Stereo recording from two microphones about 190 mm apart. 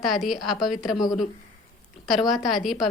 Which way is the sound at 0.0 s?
Centre (ahead or behind).